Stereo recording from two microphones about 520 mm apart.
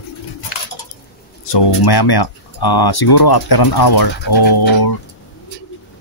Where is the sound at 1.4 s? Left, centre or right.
Left.